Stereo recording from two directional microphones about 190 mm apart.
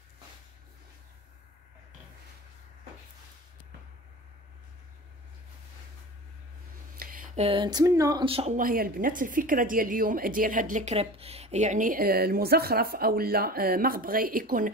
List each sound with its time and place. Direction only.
7.0 s a sound: 45° right (ahead or behind)
7.4 s speech: 25° right (ahead or behind)
8.5 s a woman's voice: 50° right (ahead or behind)